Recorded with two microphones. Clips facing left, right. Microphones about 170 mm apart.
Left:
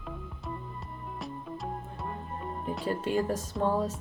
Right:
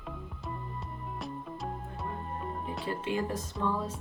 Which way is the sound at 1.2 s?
Centre (ahead or behind).